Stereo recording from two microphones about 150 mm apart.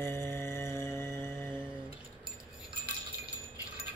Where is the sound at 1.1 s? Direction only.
15° left (ahead or behind).